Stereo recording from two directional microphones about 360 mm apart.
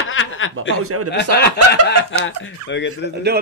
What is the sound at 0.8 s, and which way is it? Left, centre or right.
Speech, right.